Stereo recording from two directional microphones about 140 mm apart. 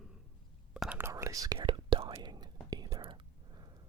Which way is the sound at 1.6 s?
40° right (ahead or behind).